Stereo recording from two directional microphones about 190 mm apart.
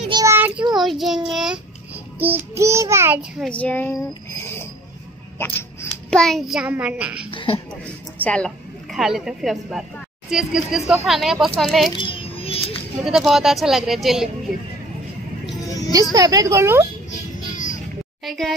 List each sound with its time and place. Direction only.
0.1 s child singing: 15° right (ahead or behind)
0.7 s a child's voice: centre (ahead or behind)
1.3 s child singing: 5° right (ahead or behind)
2.1 s a child's voice: 10° right (ahead or behind); by 4.6 s 15° left (ahead or behind)
5.4 s a sound: 15° left (ahead or behind)
6.0 s a child's voice: centre (ahead or behind)
7.2 s speech: 30° left (ahead or behind)
7.8 s a woman's voice: 5° left (ahead or behind)
12.0 s music: 30° left (ahead or behind)
13.0 s a child's voice: centre (ahead or behind)
15.9 s speech: 20° right (ahead or behind)
17.5 s a sound: 40° left (ahead or behind)
18.2 s speech: centre (ahead or behind)